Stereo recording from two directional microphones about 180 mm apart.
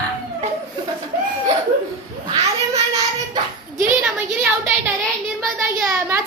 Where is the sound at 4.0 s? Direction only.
5° right (ahead or behind).